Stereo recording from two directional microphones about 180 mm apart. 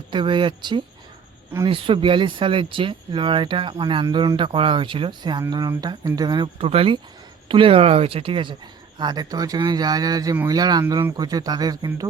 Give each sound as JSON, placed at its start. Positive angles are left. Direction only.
{"t": 0.1, "sound": "speech", "side_deg": -25}